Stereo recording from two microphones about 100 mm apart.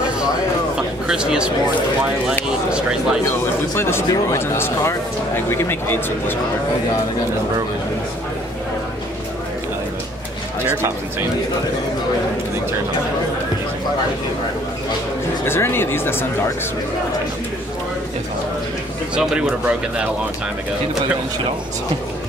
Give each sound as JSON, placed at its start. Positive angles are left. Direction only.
{"t": 1.0, "sound": "speech", "side_deg": -10}
{"t": 2.7, "sound": "speech", "side_deg": -5}
{"t": 3.3, "sound": "speech", "side_deg": 25}
{"t": 10.7, "sound": "speech", "side_deg": -25}
{"t": 15.4, "sound": "speech", "side_deg": 25}